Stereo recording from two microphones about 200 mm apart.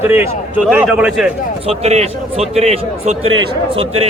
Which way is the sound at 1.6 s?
30° right (ahead or behind).